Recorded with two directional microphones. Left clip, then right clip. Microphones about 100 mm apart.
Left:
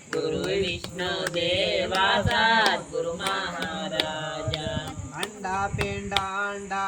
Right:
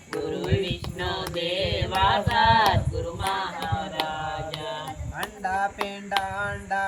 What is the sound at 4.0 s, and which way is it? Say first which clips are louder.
Mantra: left 1 dB; 35° left (ahead or behind).